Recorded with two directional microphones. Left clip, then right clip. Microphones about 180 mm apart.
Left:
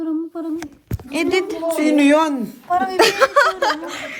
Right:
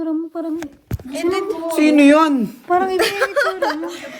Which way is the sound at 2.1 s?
55° right (ahead or behind).